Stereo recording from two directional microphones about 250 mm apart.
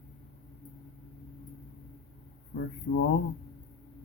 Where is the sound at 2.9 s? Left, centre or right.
Left.